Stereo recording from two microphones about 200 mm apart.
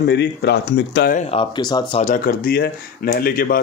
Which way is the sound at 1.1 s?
35° left (ahead or behind).